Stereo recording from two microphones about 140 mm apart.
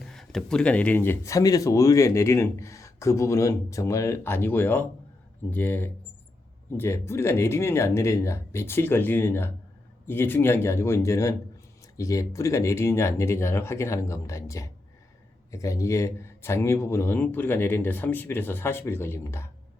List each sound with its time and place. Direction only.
0.0 s speech: centre (ahead or behind); by 19.5 s 20° left (ahead or behind)